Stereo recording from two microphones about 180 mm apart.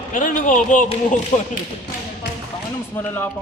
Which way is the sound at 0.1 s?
45° left (ahead or behind).